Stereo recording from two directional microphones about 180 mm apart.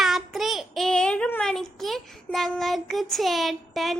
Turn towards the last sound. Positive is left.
turn(degrees=0)  # may be behind; listen again after turning